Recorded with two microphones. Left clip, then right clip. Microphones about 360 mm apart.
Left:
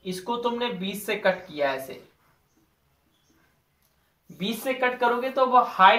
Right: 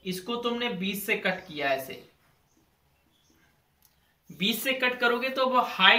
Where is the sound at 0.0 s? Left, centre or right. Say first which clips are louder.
Left 3 dB; centre.